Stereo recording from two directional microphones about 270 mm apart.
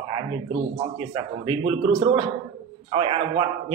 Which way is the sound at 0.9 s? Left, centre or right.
Centre.